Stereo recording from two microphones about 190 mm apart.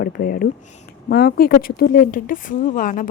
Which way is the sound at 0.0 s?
45° left (ahead or behind).